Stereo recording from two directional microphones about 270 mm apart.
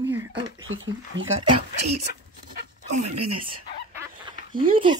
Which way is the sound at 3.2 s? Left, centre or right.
Right.